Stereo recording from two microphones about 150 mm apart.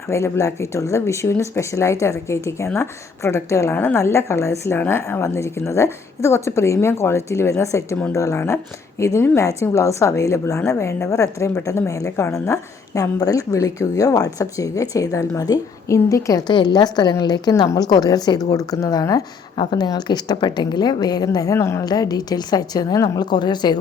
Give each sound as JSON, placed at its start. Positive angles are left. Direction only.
{"t": 0.1, "sound": "a woman's voice", "side_deg": 20}